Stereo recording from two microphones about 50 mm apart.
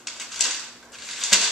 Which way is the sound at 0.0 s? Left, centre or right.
Centre.